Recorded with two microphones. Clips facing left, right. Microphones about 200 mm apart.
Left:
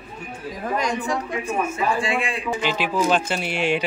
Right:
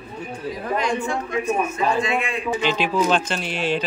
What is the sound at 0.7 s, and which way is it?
A man's voice, 40° left (ahead or behind).